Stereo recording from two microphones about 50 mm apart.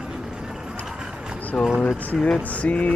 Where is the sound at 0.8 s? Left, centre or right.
Centre.